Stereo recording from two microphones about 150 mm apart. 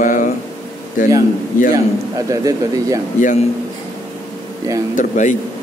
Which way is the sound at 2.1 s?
20° right (ahead or behind).